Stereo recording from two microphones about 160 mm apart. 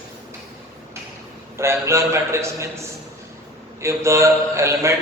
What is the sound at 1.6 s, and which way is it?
A man's voice, 15° right (ahead or behind).